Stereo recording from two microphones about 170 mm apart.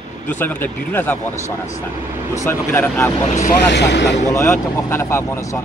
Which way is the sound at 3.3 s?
50° left (ahead or behind).